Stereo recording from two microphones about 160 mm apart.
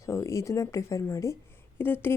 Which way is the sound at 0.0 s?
20° left (ahead or behind).